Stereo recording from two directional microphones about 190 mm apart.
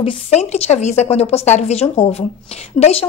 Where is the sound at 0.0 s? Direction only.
35° left (ahead or behind).